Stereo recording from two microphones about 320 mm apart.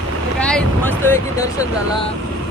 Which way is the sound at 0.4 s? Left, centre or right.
Centre.